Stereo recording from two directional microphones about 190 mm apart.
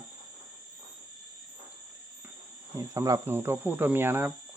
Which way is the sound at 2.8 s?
15° right (ahead or behind).